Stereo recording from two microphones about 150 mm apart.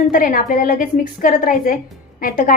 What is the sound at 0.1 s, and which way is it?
A woman's voice, 70° left (ahead or behind).